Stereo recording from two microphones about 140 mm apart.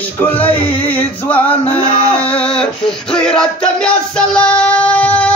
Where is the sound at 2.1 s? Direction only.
10° left (ahead or behind).